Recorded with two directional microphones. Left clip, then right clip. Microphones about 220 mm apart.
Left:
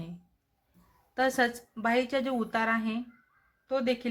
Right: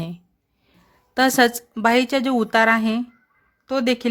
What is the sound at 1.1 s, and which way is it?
Speech, 50° right (ahead or behind).